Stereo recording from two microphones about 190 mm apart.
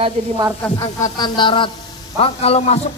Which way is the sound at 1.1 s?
25° left (ahead or behind).